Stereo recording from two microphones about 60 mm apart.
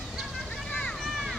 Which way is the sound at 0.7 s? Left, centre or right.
Centre.